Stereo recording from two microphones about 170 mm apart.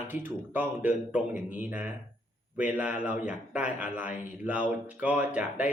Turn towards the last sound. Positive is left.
turn(degrees=-10)  # may be behind; listen again after turning